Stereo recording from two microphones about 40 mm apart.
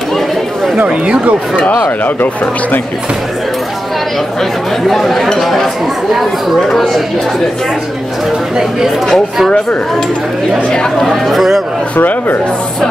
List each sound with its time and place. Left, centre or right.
0.7 s speech: right
1.6 s speech: left
4.8 s speech: centre
6.7 s speech: centre
8.5 s speech: centre
11.0 s speech: centre
12.0 s speech: left